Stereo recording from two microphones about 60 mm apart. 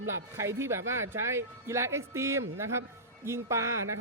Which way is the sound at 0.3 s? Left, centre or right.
Right.